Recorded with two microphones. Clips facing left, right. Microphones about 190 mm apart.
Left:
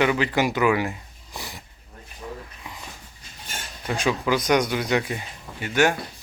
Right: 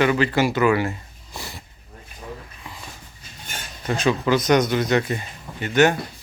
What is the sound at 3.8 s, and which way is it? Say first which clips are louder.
Speech: right 3 dB; 10° left (ahead or behind).